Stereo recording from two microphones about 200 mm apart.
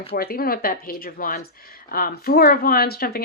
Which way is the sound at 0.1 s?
50° left (ahead or behind).